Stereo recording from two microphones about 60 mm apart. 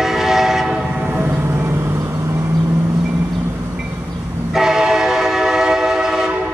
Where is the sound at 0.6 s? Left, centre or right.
Centre.